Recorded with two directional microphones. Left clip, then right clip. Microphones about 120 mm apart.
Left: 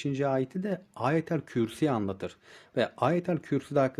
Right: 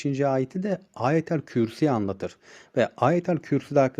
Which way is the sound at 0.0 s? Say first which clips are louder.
Right 4 dB; 25° right (ahead or behind).